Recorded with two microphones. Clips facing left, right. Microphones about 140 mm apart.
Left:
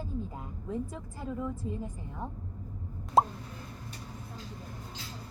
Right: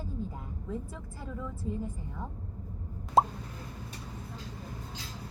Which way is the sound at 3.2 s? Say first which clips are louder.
Even; centre (ahead or behind).